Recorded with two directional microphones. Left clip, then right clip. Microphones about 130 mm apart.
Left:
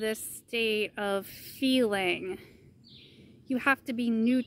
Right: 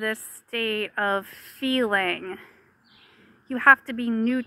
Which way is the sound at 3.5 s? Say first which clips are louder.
Right 11 dB; 45° left (ahead or behind).